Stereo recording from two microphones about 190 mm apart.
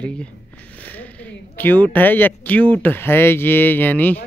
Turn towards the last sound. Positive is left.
turn(degrees=10)  # may be behind; listen again after turning